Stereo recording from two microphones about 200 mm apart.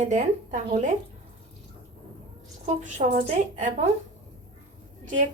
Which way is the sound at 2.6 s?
35° right (ahead or behind).